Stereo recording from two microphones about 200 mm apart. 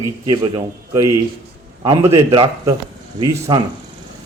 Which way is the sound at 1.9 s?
20° right (ahead or behind).